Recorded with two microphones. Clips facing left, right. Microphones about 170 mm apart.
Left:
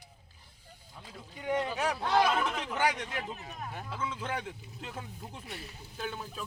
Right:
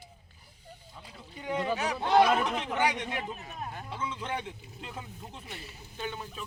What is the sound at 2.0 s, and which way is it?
Chatter, 25° right (ahead or behind).